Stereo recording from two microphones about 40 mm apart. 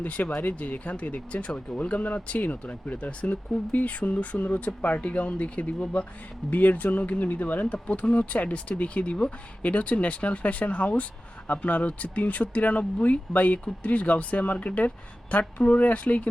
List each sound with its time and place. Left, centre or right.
0.0 s speech: left